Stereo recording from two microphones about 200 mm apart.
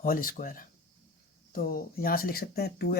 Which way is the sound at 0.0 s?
45° left (ahead or behind).